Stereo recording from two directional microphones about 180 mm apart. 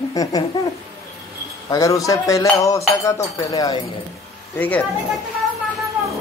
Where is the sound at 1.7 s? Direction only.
20° left (ahead or behind).